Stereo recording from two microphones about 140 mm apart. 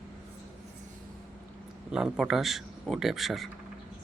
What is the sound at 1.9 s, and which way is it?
Speech, 5° right (ahead or behind).